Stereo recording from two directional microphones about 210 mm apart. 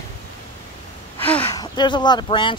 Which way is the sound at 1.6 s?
20° left (ahead or behind).